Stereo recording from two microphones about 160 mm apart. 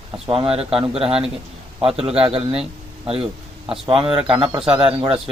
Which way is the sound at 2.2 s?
35° right (ahead or behind).